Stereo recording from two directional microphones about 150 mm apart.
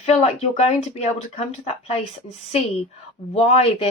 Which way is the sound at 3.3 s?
40° left (ahead or behind).